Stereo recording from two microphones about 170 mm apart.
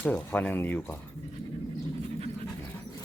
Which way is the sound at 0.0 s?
10° left (ahead or behind).